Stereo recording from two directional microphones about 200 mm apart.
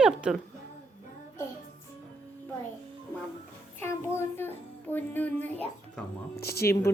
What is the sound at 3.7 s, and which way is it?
Child singing, 10° left (ahead or behind).